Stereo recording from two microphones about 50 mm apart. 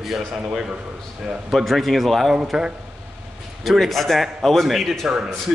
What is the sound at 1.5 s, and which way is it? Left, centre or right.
Speech, centre.